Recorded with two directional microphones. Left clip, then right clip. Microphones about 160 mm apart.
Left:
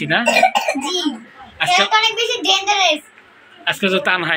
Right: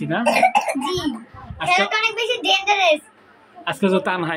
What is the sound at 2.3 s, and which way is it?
Speech, 25° right (ahead or behind).